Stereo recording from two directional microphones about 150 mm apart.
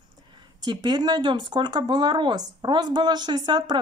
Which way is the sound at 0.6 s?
30° right (ahead or behind).